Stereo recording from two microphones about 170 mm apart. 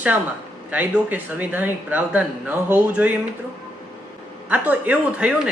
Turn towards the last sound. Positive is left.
turn(degrees=-5)  # may be behind; listen again after turning